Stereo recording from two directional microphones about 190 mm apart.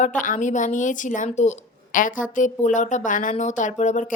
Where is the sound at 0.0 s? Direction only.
45° left (ahead or behind).